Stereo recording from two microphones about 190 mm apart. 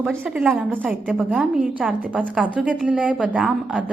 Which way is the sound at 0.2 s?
5° right (ahead or behind).